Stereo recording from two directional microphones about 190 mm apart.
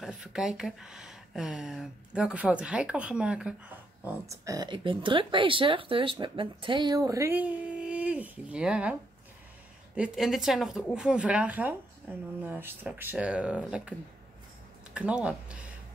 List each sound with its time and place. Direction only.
0.0 s speech: 5° right (ahead or behind)
4.0 s speech: 15° right (ahead or behind)
9.9 s a woman's voice: 5° right (ahead or behind)
15.0 s a woman's voice: 5° right (ahead or behind)